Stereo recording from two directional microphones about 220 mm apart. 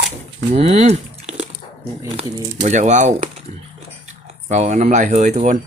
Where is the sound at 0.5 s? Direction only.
30° right (ahead or behind).